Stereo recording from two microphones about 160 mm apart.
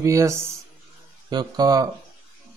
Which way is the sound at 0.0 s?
20° right (ahead or behind).